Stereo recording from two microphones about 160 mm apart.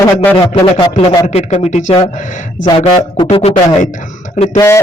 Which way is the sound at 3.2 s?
35° left (ahead or behind).